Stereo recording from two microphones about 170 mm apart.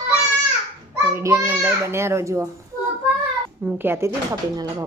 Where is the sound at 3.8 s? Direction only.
15° right (ahead or behind).